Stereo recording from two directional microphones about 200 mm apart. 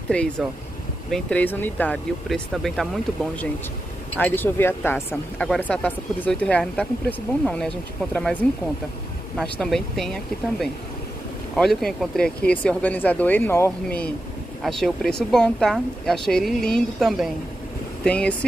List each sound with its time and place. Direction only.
0.1 s speech: 5° left (ahead or behind)
4.2 s speech: 10° left (ahead or behind)
11.5 s speech: centre (ahead or behind)